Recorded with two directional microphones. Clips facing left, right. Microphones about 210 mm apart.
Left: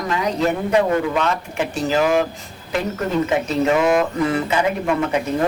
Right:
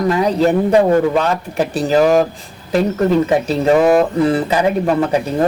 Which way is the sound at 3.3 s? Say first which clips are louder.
Right 4 dB; 35° right (ahead or behind).